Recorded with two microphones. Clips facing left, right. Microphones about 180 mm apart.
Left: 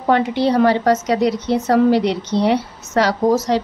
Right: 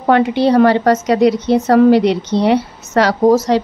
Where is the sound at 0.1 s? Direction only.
70° right (ahead or behind).